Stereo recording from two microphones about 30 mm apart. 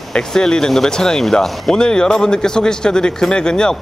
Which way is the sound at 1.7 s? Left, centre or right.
Left.